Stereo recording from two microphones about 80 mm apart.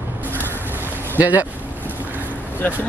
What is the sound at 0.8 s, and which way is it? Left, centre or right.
Boat, right.